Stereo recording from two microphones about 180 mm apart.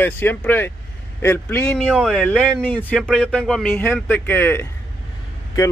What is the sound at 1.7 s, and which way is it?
Speech, 5° right (ahead or behind).